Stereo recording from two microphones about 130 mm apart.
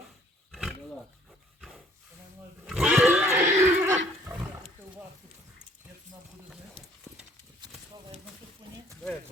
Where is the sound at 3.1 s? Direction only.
15° right (ahead or behind).